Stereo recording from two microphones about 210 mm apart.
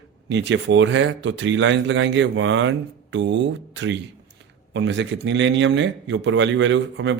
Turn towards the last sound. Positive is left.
turn(degrees=-60)  # may be behind; listen again after turning